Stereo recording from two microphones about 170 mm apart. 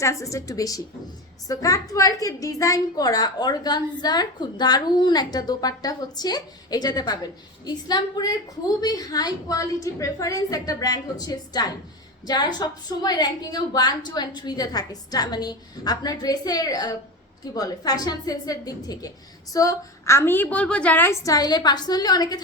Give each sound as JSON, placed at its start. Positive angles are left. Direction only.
{"t": 0.0, "sound": "a woman's voice", "side_deg": 20}